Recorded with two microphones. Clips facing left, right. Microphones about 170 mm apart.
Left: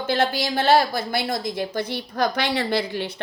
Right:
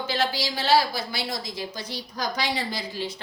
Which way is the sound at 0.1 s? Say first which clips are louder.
Left 6 dB; 55° left (ahead or behind).